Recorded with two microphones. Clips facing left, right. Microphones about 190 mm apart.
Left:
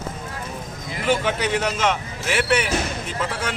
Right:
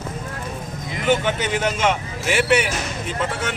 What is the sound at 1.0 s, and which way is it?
A man's voice, centre (ahead or behind).